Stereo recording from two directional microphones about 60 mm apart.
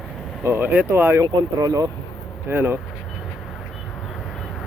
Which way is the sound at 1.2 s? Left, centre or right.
Right.